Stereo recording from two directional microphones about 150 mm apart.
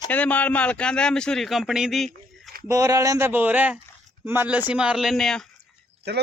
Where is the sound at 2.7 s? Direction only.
20° right (ahead or behind); by 5.4 s 5° left (ahead or behind).